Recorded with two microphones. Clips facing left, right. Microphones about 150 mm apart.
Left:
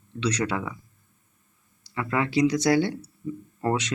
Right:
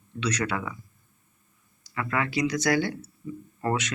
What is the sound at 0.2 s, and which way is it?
Speech, 30° left (ahead or behind).